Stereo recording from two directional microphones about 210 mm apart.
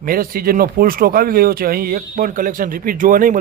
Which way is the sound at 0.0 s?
45° right (ahead or behind).